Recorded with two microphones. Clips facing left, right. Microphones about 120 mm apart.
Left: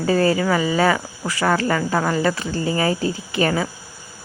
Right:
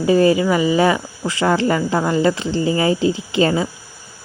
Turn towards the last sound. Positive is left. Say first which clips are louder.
# right 3 dB
turn(degrees=-25)  # may be behind; listen again after turning